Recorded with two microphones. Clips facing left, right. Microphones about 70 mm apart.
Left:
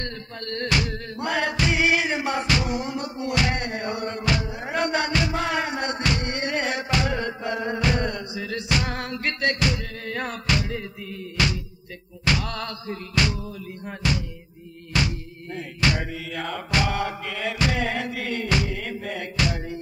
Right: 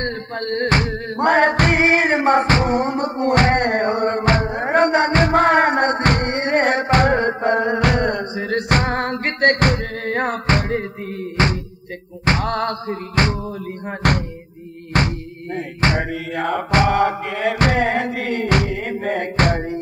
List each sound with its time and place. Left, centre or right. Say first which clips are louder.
0.0 s music: right 9 dB; right
11.4 s thunk: right 5 dB; right
14.0 s music: right 7 dB; right
14.9 s speech: right 6 dB; right
15.5 s thunk: right 5 dB; right
16.3 s music: right 8 dB; right